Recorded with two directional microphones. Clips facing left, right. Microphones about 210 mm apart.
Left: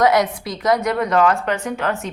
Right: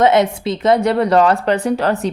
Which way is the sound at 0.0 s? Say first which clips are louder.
Right 3 dB; 25° right (ahead or behind).